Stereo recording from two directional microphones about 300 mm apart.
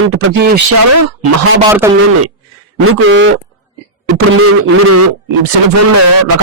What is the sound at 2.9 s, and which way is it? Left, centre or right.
A man's voice, right.